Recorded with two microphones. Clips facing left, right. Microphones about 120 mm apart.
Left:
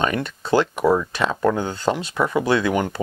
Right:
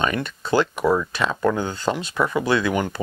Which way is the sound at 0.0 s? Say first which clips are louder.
Left 1 dB; 40° left (ahead or behind).